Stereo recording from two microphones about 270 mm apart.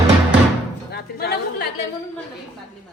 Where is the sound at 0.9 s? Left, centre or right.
Left.